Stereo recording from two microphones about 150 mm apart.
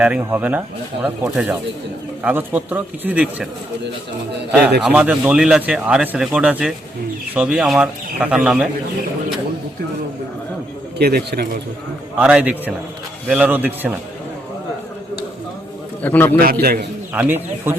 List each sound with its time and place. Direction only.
0.0 s speech: 5° right (ahead or behind)
4.9 s speech: 10° right (ahead or behind)
10.9 s speech: 90° right
12.2 s speech: 5° right (ahead or behind)
16.0 s a man's voice: 15° left (ahead or behind)
16.4 s a man's voice: 85° right
17.2 s speech: 15° right (ahead or behind)